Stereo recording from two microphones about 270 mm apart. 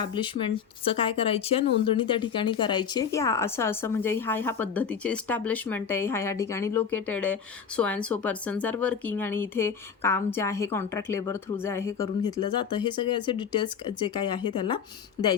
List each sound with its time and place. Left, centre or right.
0.0 s speech: centre